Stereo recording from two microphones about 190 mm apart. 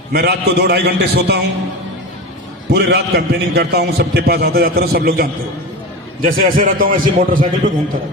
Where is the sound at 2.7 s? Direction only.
60° right (ahead or behind).